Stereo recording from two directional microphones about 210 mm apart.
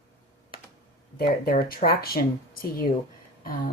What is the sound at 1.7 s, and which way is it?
Speech, 45° left (ahead or behind).